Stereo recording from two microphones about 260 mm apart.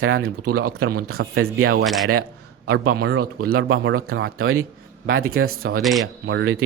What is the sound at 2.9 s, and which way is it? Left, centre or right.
A man's voice, right.